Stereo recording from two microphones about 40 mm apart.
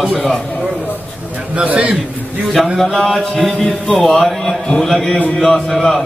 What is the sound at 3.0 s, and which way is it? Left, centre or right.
A man's voice, centre.